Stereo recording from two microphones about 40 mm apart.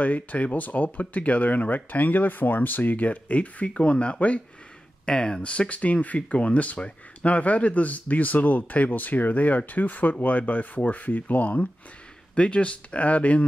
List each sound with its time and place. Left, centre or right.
0.0 s speech: left
5.0 s speech: centre
5.4 s speech: left